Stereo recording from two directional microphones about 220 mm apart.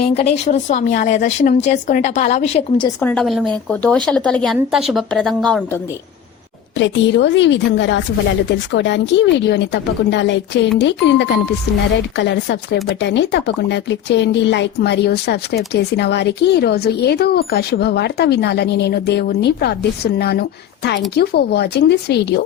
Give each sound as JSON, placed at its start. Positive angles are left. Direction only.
{"t": 0.1, "sound": "a woman's voice", "side_deg": 30}
{"t": 3.0, "sound": "speech", "side_deg": 5}
{"t": 6.7, "sound": "speech", "side_deg": 55}